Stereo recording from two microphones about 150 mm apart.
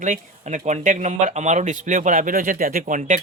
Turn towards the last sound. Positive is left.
turn(degrees=-60)  # may be behind; listen again after turning